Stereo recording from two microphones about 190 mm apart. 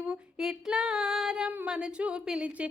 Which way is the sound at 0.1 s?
5° right (ahead or behind).